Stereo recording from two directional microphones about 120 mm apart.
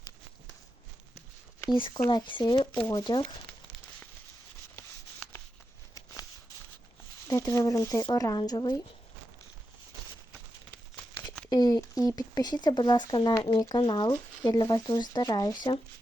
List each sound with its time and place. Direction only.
2.0 s speech: 40° left (ahead or behind)
7.3 s speech: 25° left (ahead or behind)
11.4 s speech: 35° left (ahead or behind)